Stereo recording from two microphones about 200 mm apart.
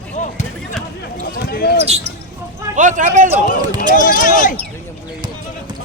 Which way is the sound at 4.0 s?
40° left (ahead or behind).